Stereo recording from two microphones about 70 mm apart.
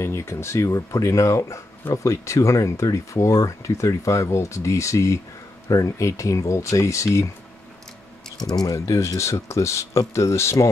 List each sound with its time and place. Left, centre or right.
0.0 s speech: left
8.5 s speech: left
8.7 s speech: left